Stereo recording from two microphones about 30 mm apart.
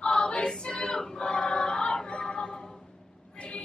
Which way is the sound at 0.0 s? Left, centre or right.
Left.